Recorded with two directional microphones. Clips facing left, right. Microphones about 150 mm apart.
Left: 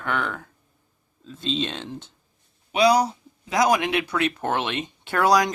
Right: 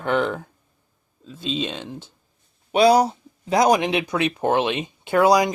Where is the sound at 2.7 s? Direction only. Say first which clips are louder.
Right 3 dB; 30° right (ahead or behind).